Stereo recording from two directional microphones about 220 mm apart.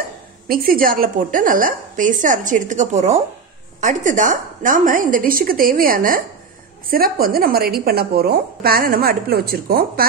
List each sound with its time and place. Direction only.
0.5 s a woman's voice: 40° right (ahead or behind)